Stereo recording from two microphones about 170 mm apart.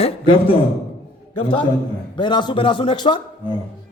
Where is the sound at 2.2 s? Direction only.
25° left (ahead or behind).